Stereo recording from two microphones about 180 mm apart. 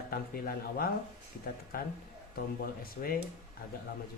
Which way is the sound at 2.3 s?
55° left (ahead or behind).